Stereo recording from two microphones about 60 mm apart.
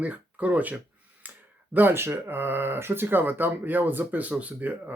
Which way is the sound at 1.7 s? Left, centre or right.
Right.